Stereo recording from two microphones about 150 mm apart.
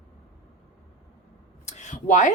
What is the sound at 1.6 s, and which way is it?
Speech, 55° left (ahead or behind).